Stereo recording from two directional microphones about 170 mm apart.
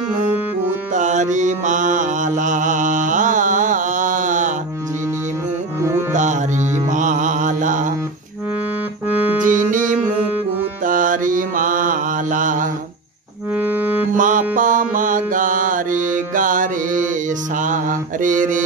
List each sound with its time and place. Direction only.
0.9 s mantra: 45° right (ahead or behind)
5.8 s music: 15° right (ahead or behind)
6.1 s mantra: 45° right (ahead or behind)
9.1 s music: 10° right (ahead or behind)
9.5 s music: 50° right (ahead or behind)
10.9 s mantra: 50° right (ahead or behind)
13.6 s music: 10° right (ahead or behind)
14.1 s music: 50° right (ahead or behind)
17.6 s mantra: 50° right (ahead or behind)